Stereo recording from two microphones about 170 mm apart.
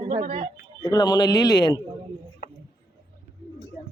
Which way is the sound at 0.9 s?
20° left (ahead or behind).